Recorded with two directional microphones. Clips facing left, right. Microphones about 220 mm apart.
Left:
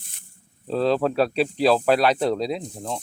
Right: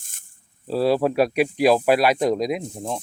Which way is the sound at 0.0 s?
45° right (ahead or behind).